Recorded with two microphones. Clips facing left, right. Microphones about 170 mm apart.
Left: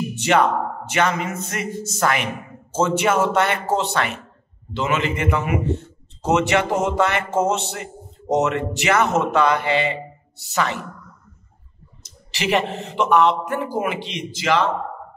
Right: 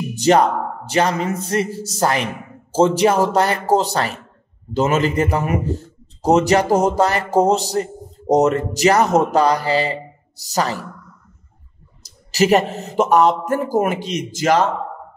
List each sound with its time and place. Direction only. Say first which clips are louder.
0.1 s a man's voice: right 5 dB; 40° right (ahead or behind)
12.0 s a man's voice: right 11 dB; 40° right (ahead or behind)